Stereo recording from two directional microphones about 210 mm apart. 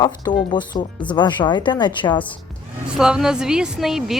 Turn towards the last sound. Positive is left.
turn(degrees=0)  # may be behind; listen again after turning